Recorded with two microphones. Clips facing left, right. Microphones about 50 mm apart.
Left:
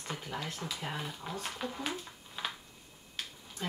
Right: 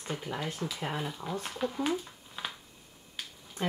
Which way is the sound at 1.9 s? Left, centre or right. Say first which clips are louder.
Right 7 dB; centre.